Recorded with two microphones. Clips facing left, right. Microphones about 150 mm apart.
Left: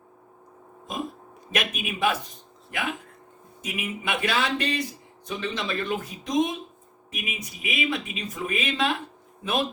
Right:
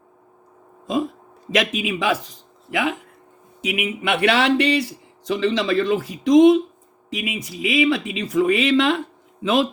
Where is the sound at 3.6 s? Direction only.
75° right (ahead or behind).